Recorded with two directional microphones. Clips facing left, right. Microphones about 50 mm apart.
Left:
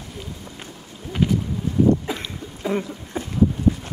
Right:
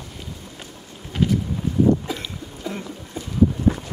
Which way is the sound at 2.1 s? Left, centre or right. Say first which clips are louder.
Left 1 dB; left.